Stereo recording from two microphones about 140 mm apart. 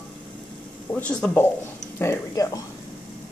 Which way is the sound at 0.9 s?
10° left (ahead or behind).